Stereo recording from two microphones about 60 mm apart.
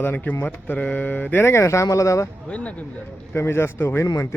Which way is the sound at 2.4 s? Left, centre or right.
Left.